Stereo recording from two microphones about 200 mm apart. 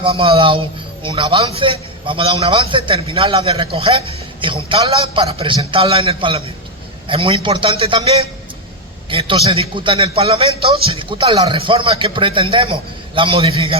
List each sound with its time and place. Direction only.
0.0 s a man's voice: 25° right (ahead or behind)